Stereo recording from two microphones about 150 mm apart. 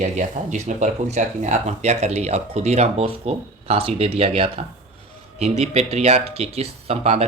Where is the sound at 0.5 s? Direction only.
50° right (ahead or behind).